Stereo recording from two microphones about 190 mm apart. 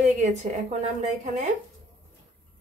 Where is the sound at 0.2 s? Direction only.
35° right (ahead or behind).